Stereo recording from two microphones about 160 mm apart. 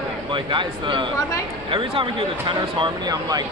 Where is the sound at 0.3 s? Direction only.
30° right (ahead or behind).